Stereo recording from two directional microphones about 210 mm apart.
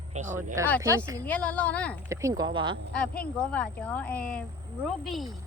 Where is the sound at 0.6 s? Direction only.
15° right (ahead or behind).